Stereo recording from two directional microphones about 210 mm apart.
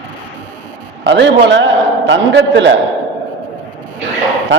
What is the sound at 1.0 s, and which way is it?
A man's voice, 60° right (ahead or behind).